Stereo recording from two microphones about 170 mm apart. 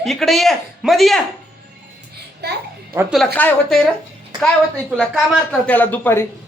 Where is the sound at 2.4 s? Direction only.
75° right (ahead or behind).